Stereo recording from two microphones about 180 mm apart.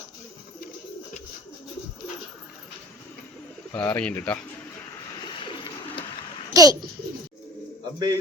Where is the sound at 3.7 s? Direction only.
10° left (ahead or behind).